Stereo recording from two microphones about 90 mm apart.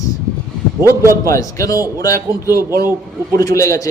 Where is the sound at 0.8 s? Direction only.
30° right (ahead or behind).